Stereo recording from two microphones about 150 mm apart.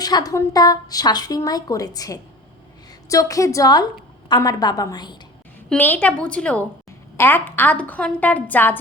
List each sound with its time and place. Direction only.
0.0 s a woman's voice: 25° left (ahead or behind)
5.6 s a woman's voice: 10° left (ahead or behind)